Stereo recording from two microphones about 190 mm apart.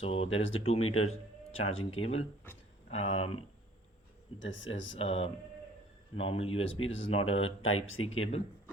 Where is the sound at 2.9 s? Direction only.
90° left.